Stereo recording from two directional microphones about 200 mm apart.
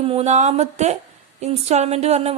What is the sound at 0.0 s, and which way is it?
Speech, 30° right (ahead or behind).